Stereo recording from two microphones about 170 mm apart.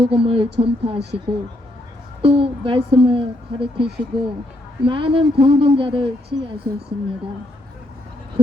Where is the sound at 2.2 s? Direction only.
35° right (ahead or behind).